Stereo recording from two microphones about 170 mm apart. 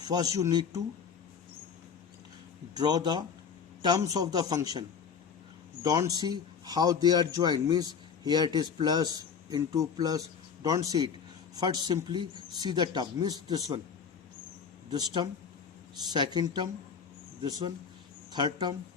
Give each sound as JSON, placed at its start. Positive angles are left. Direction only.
{"t": 0.0, "sound": "a man's voice", "side_deg": -20}
{"t": 2.7, "sound": "a man's voice", "side_deg": -25}
{"t": 14.8, "sound": "a man's voice", "side_deg": -25}